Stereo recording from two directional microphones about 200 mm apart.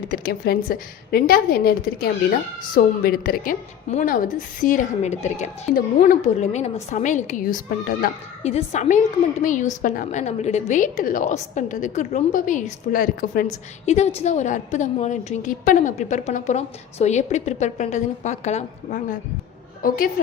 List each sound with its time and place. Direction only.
0.1 s a woman's voice: 50° left (ahead or behind)